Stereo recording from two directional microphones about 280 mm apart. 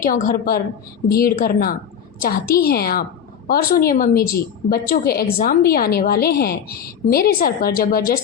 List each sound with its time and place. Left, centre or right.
0.0 s a woman's voice: left